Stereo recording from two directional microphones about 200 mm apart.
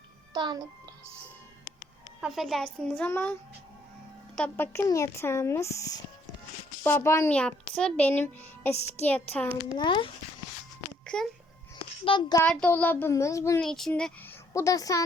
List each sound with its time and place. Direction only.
0.3 s a child's voice: 20° right (ahead or behind)
2.2 s speech: centre (ahead or behind)
4.4 s speech: 10° left (ahead or behind)
9.7 s a child's voice: 25° left (ahead or behind)
11.0 s a sound: 5° left (ahead or behind)
12.0 s a child's voice: 25° left (ahead or behind)
12.4 s speech: 5° left (ahead or behind)
13.6 s speech: centre (ahead or behind); by 15.0 s 15° left (ahead or behind)